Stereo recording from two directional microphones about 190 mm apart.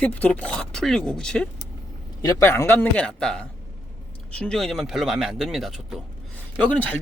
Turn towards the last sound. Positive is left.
turn(degrees=5)  # may be behind; listen again after turning